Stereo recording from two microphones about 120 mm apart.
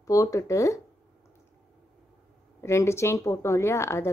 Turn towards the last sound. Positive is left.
turn(degrees=25)  # may be behind; listen again after turning